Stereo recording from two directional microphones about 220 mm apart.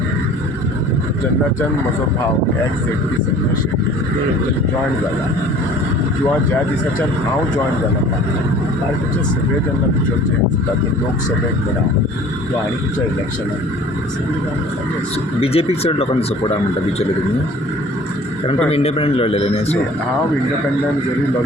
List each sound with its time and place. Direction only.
15.4 s a man's voice: 25° left (ahead or behind)
18.4 s a man's voice: 25° left (ahead or behind)